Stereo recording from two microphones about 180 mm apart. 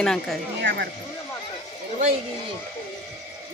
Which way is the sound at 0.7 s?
90° right.